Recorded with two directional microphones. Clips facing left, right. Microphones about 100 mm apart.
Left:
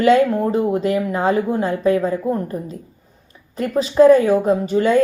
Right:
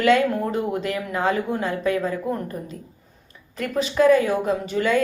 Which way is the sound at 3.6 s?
30° left (ahead or behind).